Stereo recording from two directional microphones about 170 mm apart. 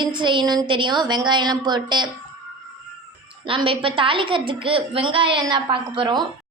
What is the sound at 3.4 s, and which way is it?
A woman's voice, 30° right (ahead or behind).